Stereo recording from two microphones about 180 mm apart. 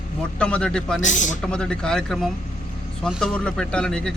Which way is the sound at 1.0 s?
45° left (ahead or behind).